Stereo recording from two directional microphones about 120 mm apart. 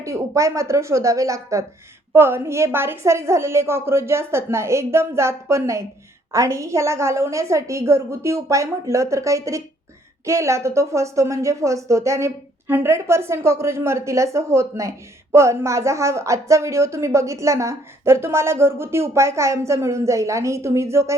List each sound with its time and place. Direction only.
0.0 s speech: 25° right (ahead or behind)